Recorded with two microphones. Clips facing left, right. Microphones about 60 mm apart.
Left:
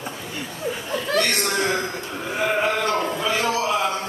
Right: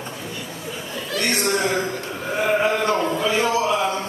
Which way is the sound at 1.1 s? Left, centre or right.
Left.